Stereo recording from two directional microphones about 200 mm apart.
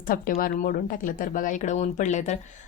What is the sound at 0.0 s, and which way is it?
Speech, 45° left (ahead or behind).